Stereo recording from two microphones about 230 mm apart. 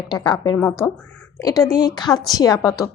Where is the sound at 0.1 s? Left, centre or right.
Centre.